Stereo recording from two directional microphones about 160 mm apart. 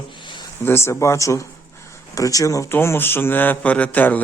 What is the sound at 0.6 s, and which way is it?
Speech, 15° left (ahead or behind).